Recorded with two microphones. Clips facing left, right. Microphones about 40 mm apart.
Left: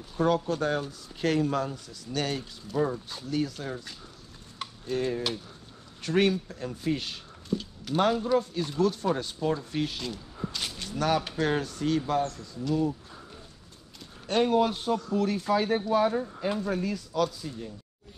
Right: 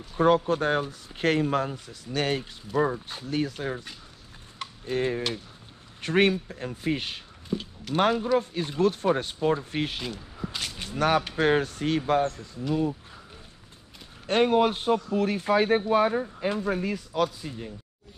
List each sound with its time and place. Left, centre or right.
0.2 s speech: right
14.2 s speech: right